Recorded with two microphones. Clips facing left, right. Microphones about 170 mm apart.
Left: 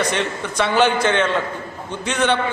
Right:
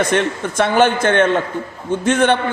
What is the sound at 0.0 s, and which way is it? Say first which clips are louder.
A man's voice: right 5 dB; 50° right (ahead or behind).